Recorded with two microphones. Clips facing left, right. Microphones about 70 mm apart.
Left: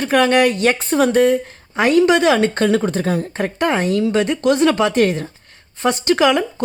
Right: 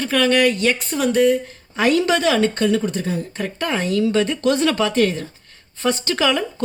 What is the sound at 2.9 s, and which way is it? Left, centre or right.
Speech, left.